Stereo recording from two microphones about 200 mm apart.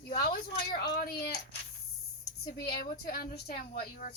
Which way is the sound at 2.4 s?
50° left (ahead or behind).